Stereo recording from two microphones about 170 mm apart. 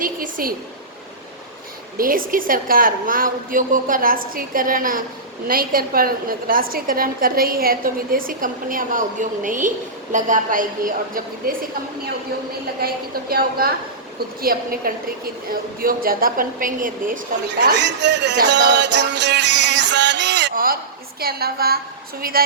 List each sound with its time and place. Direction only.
0.0 s a woman's voice: 55° right (ahead or behind)
2.0 s a woman's voice: 55° right (ahead or behind)
12.8 s a woman's voice: 65° right (ahead or behind)
17.7 s music: 90° right
20.5 s a woman's voice: 55° right (ahead or behind)